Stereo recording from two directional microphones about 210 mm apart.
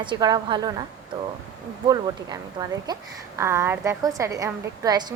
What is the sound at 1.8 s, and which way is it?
A woman's voice, 15° right (ahead or behind).